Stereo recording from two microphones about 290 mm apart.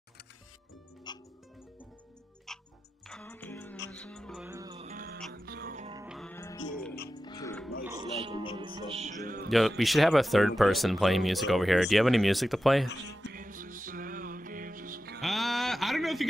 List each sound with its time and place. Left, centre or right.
1.1 s music: centre
3.1 s music: centre; by 5.9 s right
5.9 s music: centre
7.8 s music: centre
9.5 s speech: centre
13.3 s music: right
15.1 s a sound: centre